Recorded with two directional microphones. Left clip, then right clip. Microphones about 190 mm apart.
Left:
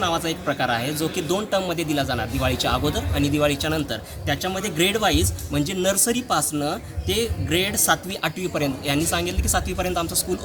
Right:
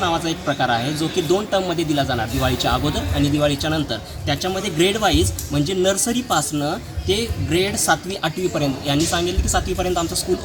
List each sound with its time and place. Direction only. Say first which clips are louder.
0.0 s a man's voice: right 2 dB; 5° left (ahead or behind)